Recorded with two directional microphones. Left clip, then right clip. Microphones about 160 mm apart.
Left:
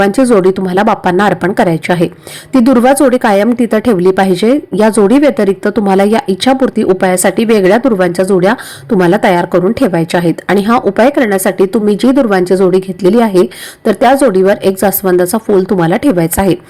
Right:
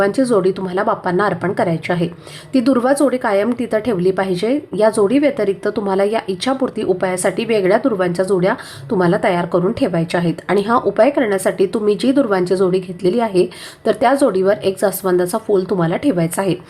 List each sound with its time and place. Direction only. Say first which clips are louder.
0.0 s a woman's voice: left 6 dB; 35° left (ahead or behind)